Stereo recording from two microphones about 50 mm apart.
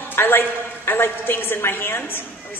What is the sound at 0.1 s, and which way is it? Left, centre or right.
A woman's voice, left.